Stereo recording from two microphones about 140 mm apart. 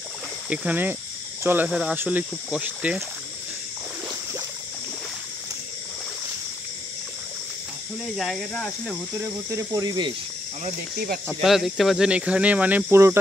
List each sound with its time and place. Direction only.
0.5 s speech: 10° right (ahead or behind)
1.7 s speech: 5° right (ahead or behind)
8.2 s speech: centre (ahead or behind)
9.2 s speech: 20° right (ahead or behind)
11.2 s speech: centre (ahead or behind); by 13.2 s 20° right (ahead or behind)